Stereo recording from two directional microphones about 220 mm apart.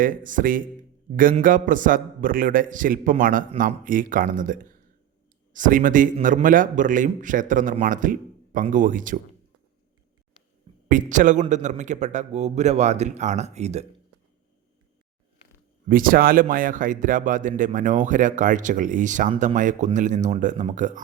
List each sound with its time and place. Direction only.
0.0 s a man's voice: 35° right (ahead or behind)
10.8 s a man's voice: 35° right (ahead or behind)
15.9 s a man's voice: 40° right (ahead or behind)